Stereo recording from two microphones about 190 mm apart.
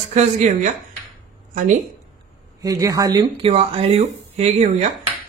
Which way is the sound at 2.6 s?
20° right (ahead or behind).